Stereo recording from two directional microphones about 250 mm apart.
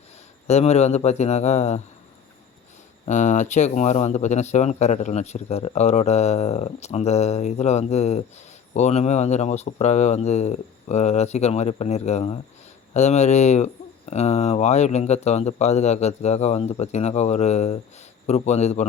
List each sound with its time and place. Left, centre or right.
0.4 s speech: left
3.1 s speech: left